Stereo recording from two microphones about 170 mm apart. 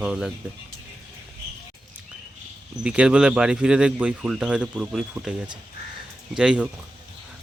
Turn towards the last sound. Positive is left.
turn(degrees=-5)  # may be behind; listen again after turning